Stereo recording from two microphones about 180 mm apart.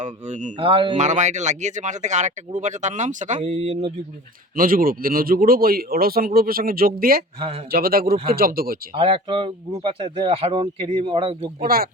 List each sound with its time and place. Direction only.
0.0 s speech: 40° right (ahead or behind)
0.9 s speech: 40° right (ahead or behind)
4.5 s speech: 50° right (ahead or behind)
7.3 s speech: 30° right (ahead or behind)
7.7 s speech: 55° right (ahead or behind)
9.0 s speech: 30° right (ahead or behind)
11.6 s speech: 55° right (ahead or behind)